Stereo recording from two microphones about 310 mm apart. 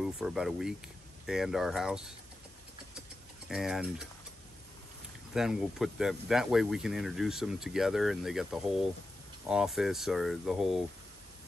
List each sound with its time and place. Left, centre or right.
0.0 s speech: centre
3.4 s speech: centre
5.3 s speech: centre